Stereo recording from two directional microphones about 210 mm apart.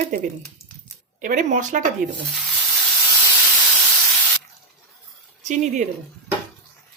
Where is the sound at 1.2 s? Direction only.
35° right (ahead or behind).